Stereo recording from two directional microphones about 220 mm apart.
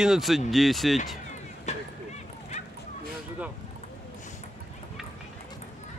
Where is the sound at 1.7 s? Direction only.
30° left (ahead or behind).